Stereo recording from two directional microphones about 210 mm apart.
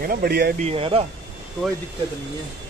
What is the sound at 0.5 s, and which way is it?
Speech, 30° right (ahead or behind).